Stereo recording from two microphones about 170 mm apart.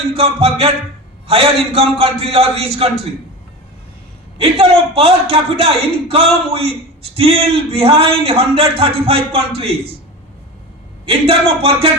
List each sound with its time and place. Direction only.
0.1 s a man's voice: 35° right (ahead or behind)
4.4 s a man's voice: 35° right (ahead or behind)
11.0 s a man's voice: 35° right (ahead or behind)